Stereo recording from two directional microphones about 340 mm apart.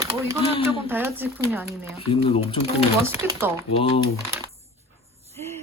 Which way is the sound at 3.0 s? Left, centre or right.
Centre.